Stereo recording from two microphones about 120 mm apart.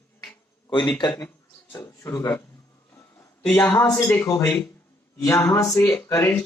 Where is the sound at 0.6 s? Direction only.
40° left (ahead or behind).